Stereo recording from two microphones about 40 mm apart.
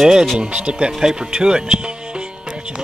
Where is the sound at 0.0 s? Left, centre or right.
Centre.